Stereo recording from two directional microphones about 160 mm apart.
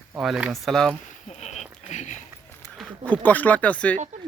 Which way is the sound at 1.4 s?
45° left (ahead or behind).